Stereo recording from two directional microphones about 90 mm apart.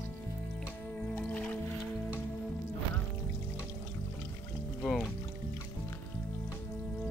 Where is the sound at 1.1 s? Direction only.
15° left (ahead or behind).